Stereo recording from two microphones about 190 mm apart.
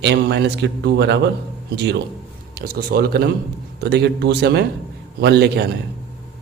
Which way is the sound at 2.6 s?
55° right (ahead or behind).